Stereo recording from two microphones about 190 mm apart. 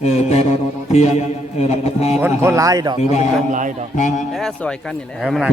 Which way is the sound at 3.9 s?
40° left (ahead or behind).